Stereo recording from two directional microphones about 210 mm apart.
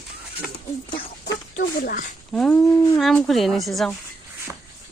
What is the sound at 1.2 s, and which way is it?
Chicken, 50° left (ahead or behind).